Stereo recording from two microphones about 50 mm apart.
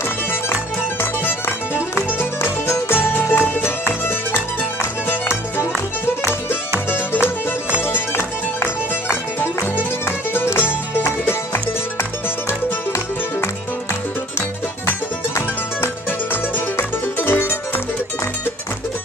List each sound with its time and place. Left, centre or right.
2.1 s music: left
3.1 s music: left
6.9 s music: left
15.3 s music: left